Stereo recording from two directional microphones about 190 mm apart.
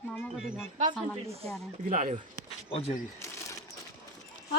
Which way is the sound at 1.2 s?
30° right (ahead or behind).